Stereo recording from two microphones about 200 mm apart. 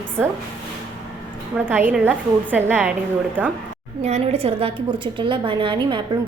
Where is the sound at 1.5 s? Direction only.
10° right (ahead or behind).